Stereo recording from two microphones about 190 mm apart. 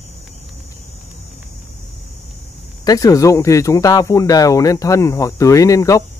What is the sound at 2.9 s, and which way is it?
Speech, 20° left (ahead or behind).